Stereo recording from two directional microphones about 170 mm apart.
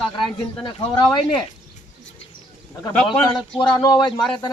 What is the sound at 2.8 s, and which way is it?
Speech, 30° left (ahead or behind).